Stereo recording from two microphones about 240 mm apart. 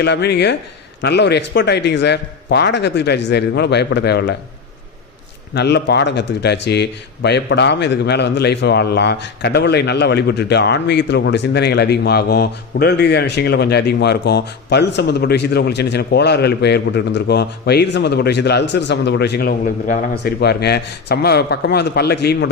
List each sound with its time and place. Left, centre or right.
0.0 s a man's voice: left
5.5 s a man's voice: left